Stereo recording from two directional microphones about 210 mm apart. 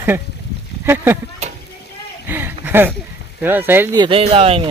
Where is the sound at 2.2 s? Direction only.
10° right (ahead or behind).